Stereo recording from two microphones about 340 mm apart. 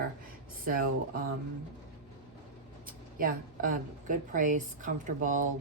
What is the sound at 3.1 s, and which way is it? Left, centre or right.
A woman's voice, right.